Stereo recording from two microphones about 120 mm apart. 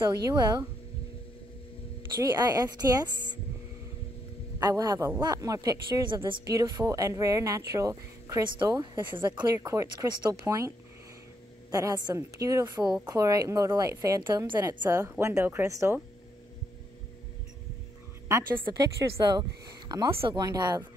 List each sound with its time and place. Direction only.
0.0 s a woman's voice: 35° right (ahead or behind)
2.2 s a woman's voice: 30° right (ahead or behind)
4.6 s a woman's voice: 35° right (ahead or behind)
9.2 s a woman's voice: 35° right (ahead or behind)
9.7 s speech: 25° right (ahead or behind)
11.7 s speech: 30° right (ahead or behind)
18.3 s speech: 20° right (ahead or behind)
18.7 s a woman's voice: 35° right (ahead or behind)